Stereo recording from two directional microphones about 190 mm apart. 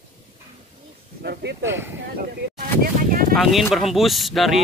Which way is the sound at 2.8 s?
50° right (ahead or behind).